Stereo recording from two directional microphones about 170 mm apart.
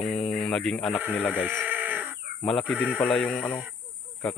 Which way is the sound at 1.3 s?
10° right (ahead or behind).